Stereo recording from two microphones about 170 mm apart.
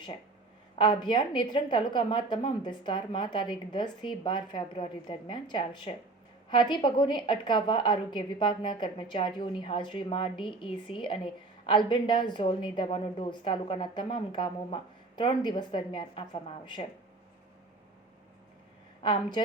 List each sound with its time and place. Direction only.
0.8 s a woman's voice: 25° left (ahead or behind)
19.0 s a woman's voice: 25° left (ahead or behind)